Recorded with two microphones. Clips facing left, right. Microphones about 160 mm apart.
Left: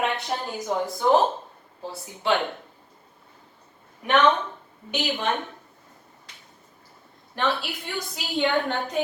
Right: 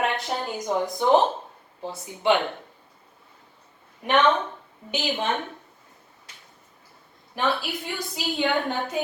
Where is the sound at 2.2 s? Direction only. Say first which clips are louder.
Right 3 dB; 20° right (ahead or behind).